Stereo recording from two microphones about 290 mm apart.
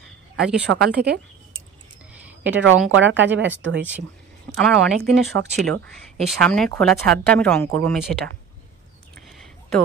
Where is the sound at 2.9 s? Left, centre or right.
Right.